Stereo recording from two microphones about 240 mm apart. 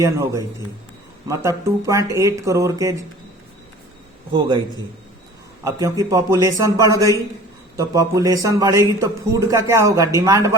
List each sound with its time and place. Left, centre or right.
0.0 s a man's voice: centre
4.3 s a man's voice: centre
5.6 s a man's voice: centre